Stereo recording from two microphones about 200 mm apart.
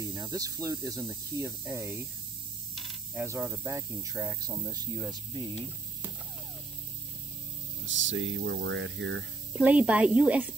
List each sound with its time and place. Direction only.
0.0 s speech: 20° right (ahead or behind)
2.7 s mechanisms: centre (ahead or behind)
3.2 s speech: 15° right (ahead or behind)
7.8 s speech: 70° right (ahead or behind)
9.5 s speech: 5° right (ahead or behind)